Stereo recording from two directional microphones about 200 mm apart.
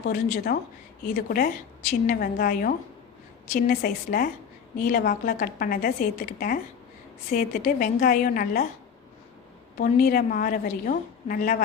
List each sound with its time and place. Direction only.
0.0 s a woman's voice: 50° left (ahead or behind)
9.7 s a woman's voice: 50° left (ahead or behind)